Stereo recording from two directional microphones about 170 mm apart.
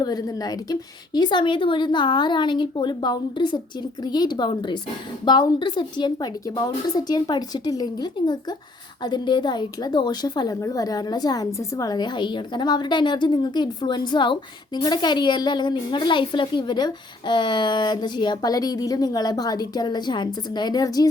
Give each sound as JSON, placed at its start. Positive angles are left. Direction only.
{"t": 0.0, "sound": "a woman's voice", "side_deg": 25}